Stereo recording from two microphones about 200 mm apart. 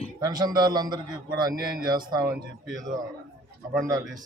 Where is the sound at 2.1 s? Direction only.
20° right (ahead or behind).